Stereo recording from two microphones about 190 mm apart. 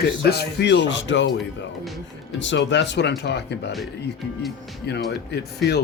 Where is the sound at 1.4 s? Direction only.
Centre (ahead or behind).